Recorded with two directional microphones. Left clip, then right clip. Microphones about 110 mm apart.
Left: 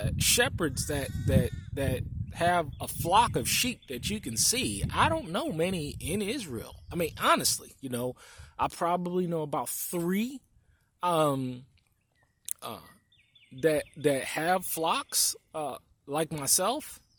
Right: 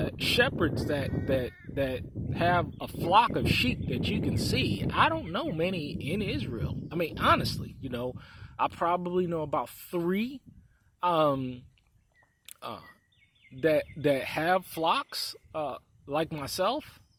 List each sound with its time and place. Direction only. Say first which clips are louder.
0.0 s speech: right 1 dB; 50° left (ahead or behind); by 11.6 s 65° left (ahead or behind)
12.5 s a sound: even; 40° left (ahead or behind)
13.6 s speech: right 1 dB; 40° left (ahead or behind)